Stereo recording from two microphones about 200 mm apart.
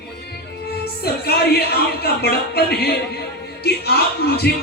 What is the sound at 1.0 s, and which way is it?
Speech, 50° left (ahead or behind).